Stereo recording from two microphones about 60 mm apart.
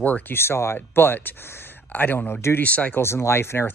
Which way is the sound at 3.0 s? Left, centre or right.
Left.